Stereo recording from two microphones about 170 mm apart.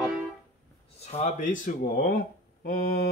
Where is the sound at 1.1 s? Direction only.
45° left (ahead or behind).